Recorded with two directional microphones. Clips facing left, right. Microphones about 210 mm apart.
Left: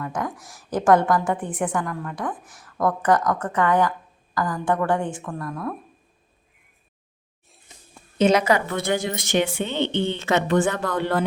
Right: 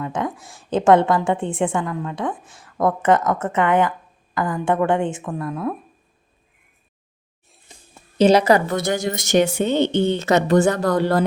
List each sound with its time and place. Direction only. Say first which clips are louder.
0.0 s a woman's voice: right 3 dB; 25° right (ahead or behind)
8.2 s a woman's voice: right 4 dB; 35° right (ahead or behind)